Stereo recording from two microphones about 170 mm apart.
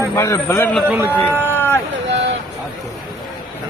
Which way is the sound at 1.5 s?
10° left (ahead or behind).